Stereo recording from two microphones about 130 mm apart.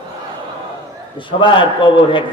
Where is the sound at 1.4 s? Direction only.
40° left (ahead or behind).